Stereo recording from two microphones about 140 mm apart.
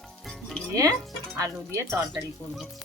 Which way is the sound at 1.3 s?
20° right (ahead or behind).